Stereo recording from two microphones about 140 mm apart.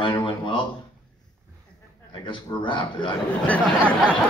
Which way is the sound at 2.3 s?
35° left (ahead or behind).